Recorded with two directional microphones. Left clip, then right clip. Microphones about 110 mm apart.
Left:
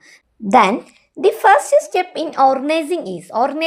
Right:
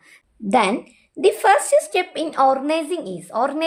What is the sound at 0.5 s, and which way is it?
A woman's voice, 15° left (ahead or behind).